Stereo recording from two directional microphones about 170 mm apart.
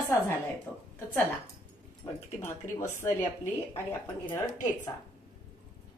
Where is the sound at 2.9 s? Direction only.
15° left (ahead or behind).